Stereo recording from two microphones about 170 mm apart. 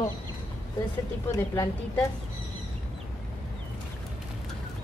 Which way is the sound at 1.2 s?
15° left (ahead or behind).